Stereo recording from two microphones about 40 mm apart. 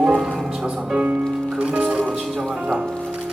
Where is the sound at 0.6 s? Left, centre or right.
Centre.